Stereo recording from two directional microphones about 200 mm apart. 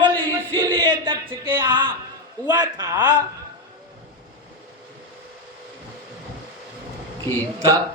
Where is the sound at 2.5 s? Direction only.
20° right (ahead or behind).